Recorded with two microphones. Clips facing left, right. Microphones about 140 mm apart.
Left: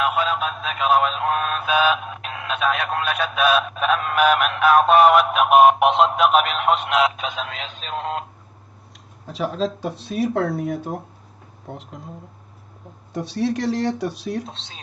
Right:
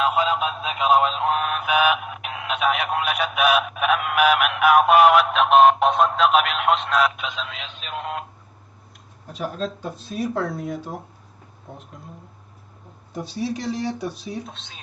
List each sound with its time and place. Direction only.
0.0 s a sound: 20° right (ahead or behind); by 5.9 s 10° left (ahead or behind)
5.9 s speech: 25° left (ahead or behind)
6.1 s speech: 5° left (ahead or behind)
6.8 s speech: 20° left (ahead or behind)
7.2 s a man's voice: 45° left (ahead or behind)
9.2 s speech: 90° left; by 10.9 s 55° left (ahead or behind)
11.7 s speech: 90° left
13.1 s speech: 75° left (ahead or behind)
14.4 s a man's voice: 30° left (ahead or behind)